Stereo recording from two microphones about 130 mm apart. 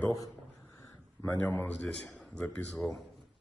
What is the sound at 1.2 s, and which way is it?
Speech, 15° left (ahead or behind).